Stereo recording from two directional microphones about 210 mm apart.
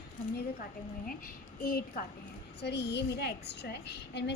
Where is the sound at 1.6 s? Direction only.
45° left (ahead or behind).